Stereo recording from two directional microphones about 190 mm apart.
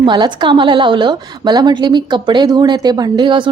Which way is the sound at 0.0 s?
25° right (ahead or behind).